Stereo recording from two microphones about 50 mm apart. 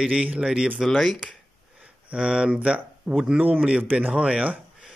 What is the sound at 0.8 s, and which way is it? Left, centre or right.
Speech, centre.